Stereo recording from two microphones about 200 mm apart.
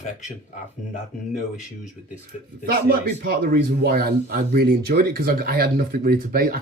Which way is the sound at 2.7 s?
50° right (ahead or behind).